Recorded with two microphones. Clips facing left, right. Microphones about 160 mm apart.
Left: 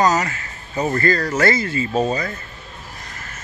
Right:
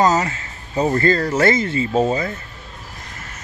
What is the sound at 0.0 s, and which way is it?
Speech, 25° right (ahead or behind).